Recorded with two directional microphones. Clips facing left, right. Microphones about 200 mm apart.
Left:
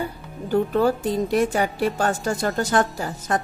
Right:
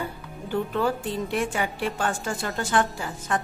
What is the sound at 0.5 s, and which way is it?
A woman's voice, 40° left (ahead or behind).